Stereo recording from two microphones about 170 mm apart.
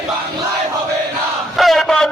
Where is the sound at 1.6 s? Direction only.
Centre (ahead or behind).